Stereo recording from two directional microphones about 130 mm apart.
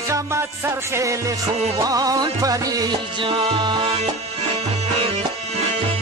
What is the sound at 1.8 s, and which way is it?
Music, 30° right (ahead or behind).